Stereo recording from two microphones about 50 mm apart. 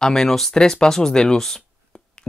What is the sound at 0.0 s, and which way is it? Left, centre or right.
Speech, centre.